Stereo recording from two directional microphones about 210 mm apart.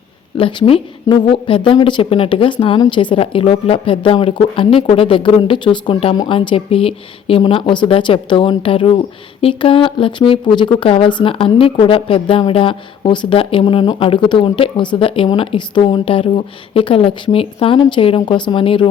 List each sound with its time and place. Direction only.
0.3 s speech: 25° left (ahead or behind)